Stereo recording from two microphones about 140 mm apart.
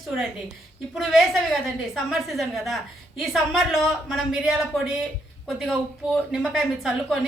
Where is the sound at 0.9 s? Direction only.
Centre (ahead or behind).